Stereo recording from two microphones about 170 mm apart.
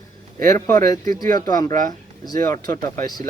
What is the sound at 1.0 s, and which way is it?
Speech, 20° left (ahead or behind).